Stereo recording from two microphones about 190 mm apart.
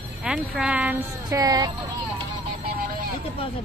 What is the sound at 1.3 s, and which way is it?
Music, 20° right (ahead or behind).